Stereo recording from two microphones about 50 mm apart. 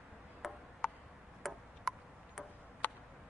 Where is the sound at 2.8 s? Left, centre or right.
Left.